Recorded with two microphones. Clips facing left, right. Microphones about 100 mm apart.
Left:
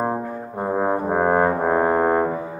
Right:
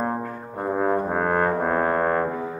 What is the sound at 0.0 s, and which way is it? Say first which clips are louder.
Brass instrument: left 3 dB; 10° left (ahead or behind).